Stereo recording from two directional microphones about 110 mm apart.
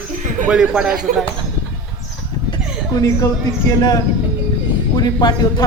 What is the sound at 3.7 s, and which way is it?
A man's voice, 35° left (ahead or behind).